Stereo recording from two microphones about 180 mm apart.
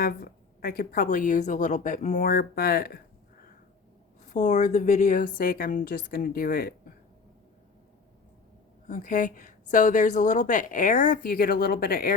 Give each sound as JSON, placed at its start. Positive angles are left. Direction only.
{"t": 0.0, "sound": "a woman's voice", "side_deg": 55}
{"t": 4.3, "sound": "a woman's voice", "side_deg": 40}
{"t": 8.9, "sound": "a woman's voice", "side_deg": 45}